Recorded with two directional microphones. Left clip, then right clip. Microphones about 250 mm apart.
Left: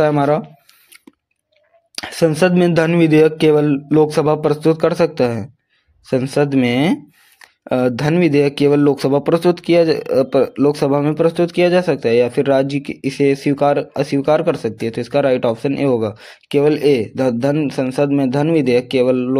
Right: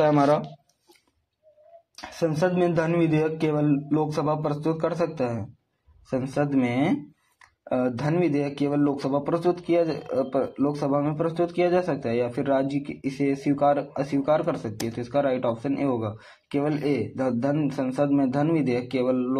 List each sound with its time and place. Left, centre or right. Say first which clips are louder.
0.0 s speech: left 5 dB; left
2.0 s speech: left 10 dB; left